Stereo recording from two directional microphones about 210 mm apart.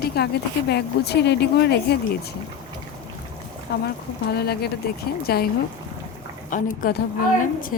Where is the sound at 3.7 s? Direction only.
50° left (ahead or behind).